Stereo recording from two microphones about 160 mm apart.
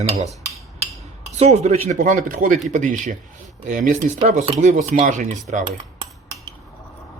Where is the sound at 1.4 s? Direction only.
45° right (ahead or behind).